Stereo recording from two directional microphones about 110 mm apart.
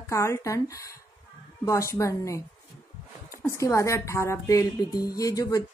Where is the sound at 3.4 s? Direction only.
25° left (ahead or behind).